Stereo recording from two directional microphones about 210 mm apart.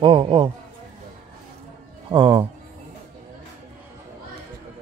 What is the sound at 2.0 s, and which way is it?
Speech, 25° right (ahead or behind).